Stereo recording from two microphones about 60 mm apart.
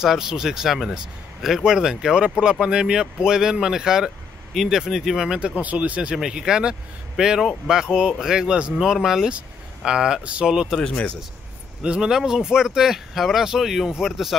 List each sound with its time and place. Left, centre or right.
0.0 s speech: centre
5.6 s speech: right
6.1 s speech: centre
11.8 s speech: centre